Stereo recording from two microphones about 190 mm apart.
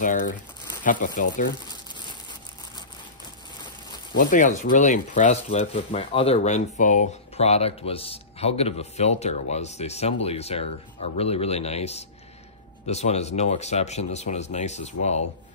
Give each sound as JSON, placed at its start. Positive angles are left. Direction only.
{"t": 0.8, "sound": "speech", "side_deg": 45}
{"t": 4.2, "sound": "speech", "side_deg": 40}